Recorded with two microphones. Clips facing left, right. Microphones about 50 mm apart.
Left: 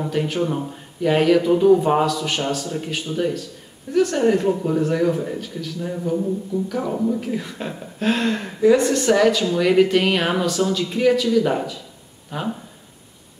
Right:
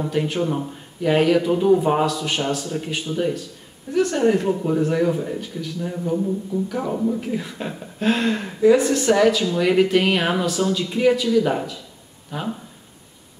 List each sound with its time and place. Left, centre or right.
0.0 s speech: centre